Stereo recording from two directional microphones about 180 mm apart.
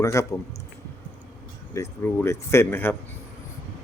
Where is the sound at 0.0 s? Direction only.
15° left (ahead or behind).